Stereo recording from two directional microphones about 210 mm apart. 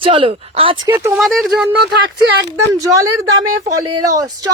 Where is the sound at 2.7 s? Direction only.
15° right (ahead or behind).